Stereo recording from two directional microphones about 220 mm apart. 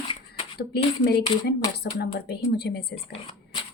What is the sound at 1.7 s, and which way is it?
A woman's voice, 45° left (ahead or behind).